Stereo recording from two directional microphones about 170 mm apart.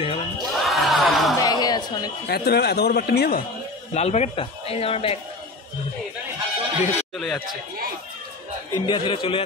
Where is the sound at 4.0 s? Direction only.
40° left (ahead or behind).